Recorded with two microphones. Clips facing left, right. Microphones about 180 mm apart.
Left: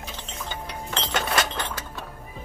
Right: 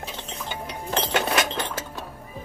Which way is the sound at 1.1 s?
15° right (ahead or behind).